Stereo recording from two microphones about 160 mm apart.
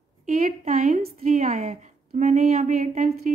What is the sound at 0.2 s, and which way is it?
A woman's voice, 55° right (ahead or behind).